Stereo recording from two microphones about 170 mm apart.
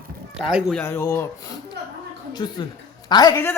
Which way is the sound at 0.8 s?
15° left (ahead or behind).